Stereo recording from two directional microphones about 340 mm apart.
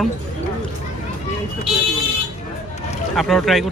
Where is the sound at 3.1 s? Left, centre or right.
Centre.